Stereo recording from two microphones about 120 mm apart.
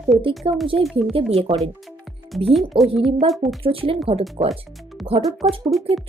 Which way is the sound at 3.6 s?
50° right (ahead or behind).